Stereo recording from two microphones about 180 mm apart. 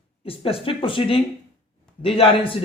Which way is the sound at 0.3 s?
30° left (ahead or behind).